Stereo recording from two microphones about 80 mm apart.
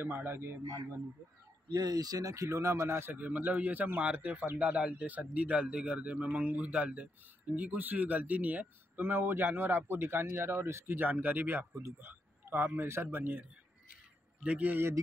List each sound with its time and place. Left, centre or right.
0.0 s speech: right
1.7 s speech: right